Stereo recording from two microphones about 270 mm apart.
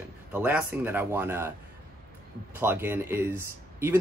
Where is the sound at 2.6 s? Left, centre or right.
Centre.